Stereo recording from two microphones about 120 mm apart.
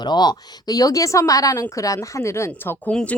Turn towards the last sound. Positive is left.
turn(degrees=10)  # may be behind; listen again after turning